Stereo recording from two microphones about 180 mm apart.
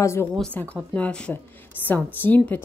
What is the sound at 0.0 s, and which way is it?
A woman's voice, 15° left (ahead or behind).